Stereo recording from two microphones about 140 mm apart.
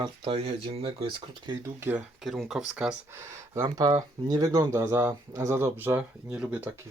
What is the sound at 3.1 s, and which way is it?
Speech, 20° right (ahead or behind).